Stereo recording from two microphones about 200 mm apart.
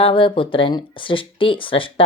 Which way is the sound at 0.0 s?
25° left (ahead or behind).